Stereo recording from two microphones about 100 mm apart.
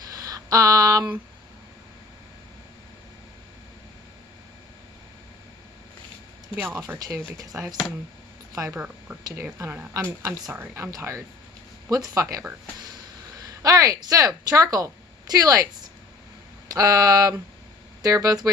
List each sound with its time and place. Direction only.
0.1 s a sound: 35° right (ahead or behind)
6.7 s speech: 20° right (ahead or behind)
7.3 s speech: 40° right (ahead or behind)
8.8 s speech: 20° right (ahead or behind)
13.6 s speech: 35° right (ahead or behind)
16.6 s speech: 40° right (ahead or behind)